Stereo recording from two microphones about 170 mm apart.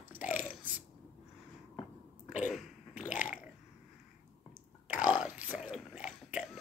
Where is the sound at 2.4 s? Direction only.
5° right (ahead or behind).